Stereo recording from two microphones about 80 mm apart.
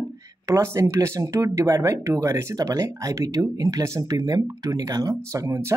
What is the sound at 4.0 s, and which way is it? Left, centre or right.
Speech, right.